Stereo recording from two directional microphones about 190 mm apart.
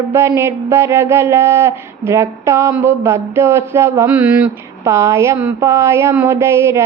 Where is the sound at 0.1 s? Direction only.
10° right (ahead or behind).